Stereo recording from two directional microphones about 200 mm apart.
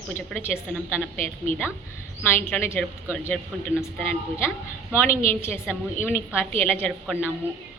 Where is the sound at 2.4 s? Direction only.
10° left (ahead or behind).